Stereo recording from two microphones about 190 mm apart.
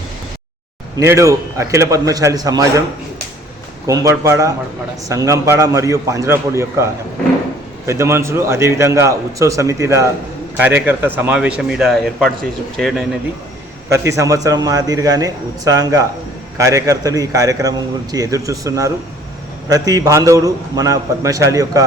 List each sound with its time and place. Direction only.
0.9 s a man's voice: 15° right (ahead or behind)
3.8 s a man's voice: 15° right (ahead or behind); by 13.1 s centre (ahead or behind)
13.9 s a man's voice: 15° right (ahead or behind)